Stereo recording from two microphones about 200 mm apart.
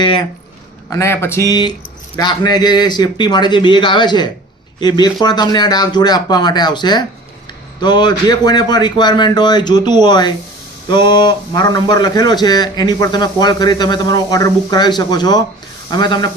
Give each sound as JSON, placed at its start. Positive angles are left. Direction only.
{"t": 0.9, "sound": "a man's voice", "side_deg": 15}